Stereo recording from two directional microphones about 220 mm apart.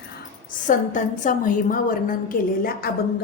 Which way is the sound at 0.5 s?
35° left (ahead or behind).